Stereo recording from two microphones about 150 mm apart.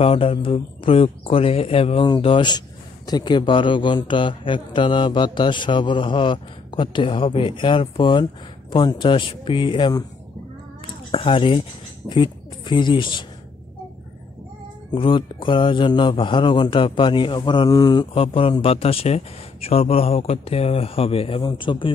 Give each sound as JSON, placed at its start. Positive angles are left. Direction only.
{"t": 0.0, "sound": "speech", "side_deg": 40}
{"t": 11.1, "sound": "speech", "side_deg": 35}
{"t": 14.9, "sound": "speech", "side_deg": 35}